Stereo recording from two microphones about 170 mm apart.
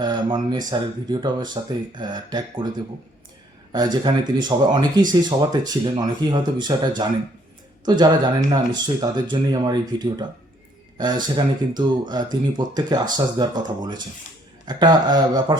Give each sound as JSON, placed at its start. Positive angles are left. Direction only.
{"t": 0.0, "sound": "speech", "side_deg": -25}
{"t": 4.0, "sound": "speech", "side_deg": -25}